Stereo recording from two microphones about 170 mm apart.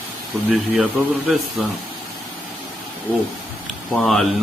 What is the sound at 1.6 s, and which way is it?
Speech, centre (ahead or behind).